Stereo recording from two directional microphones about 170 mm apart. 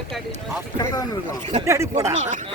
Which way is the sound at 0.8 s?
20° left (ahead or behind).